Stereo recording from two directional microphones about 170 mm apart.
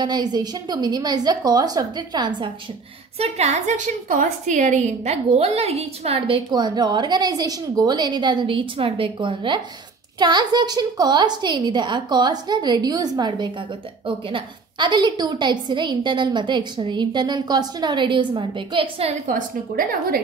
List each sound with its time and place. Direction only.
0.0 s a woman's voice: 25° right (ahead or behind)
3.2 s a woman's voice: 40° right (ahead or behind)
19.2 s a woman's voice: 55° right (ahead or behind)